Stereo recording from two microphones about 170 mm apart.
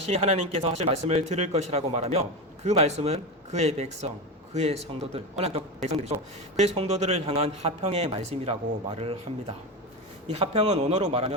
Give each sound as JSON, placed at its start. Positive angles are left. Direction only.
{"t": 0.0, "sound": "a man's voice", "side_deg": -40}
{"t": 10.2, "sound": "a man's voice", "side_deg": -35}